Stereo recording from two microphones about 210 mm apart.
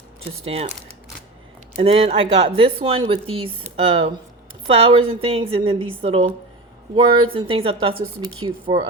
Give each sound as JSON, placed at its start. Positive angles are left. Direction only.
{"t": 0.3, "sound": "a woman's voice", "side_deg": -30}
{"t": 1.8, "sound": "a woman's voice", "side_deg": -30}
{"t": 4.6, "sound": "a woman's voice", "side_deg": -25}